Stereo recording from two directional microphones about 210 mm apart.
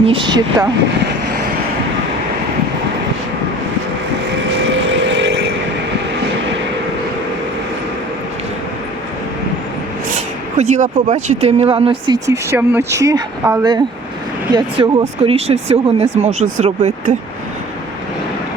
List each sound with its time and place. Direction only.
0.0 s speech: 25° right (ahead or behind)
4.3 s vehicle: 60° right (ahead or behind)
10.6 s speech: 35° right (ahead or behind)